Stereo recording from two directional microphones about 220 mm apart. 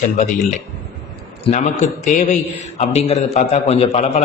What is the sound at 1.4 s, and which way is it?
A man's voice, 30° left (ahead or behind).